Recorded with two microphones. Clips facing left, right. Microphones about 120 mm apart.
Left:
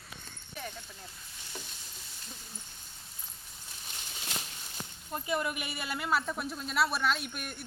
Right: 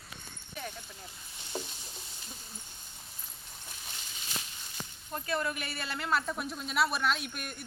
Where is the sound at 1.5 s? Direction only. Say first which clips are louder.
Right 8 dB; 35° right (ahead or behind).